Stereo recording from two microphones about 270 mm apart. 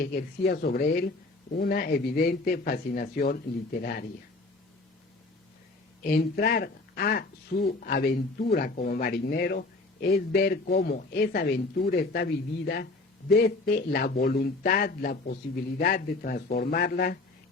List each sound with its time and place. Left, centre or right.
0.0 s speech: left
6.0 s speech: left